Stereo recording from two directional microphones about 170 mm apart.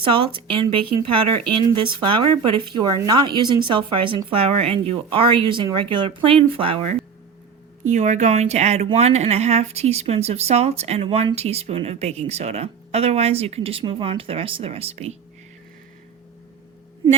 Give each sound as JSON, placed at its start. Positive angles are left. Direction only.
{"t": 0.0, "sound": "speech", "side_deg": -30}
{"t": 2.0, "sound": "speech", "side_deg": -30}
{"t": 7.9, "sound": "speech", "side_deg": -45}